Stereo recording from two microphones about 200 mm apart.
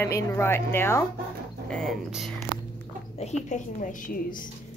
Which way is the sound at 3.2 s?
35° left (ahead or behind).